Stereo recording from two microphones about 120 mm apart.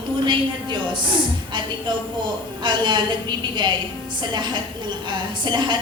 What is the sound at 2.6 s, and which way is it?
Speech, 40° right (ahead or behind).